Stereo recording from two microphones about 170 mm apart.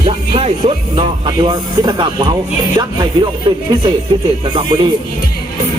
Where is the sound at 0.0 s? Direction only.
30° right (ahead or behind).